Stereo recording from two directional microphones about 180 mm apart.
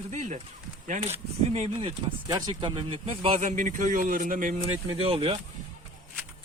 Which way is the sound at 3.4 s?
45° right (ahead or behind).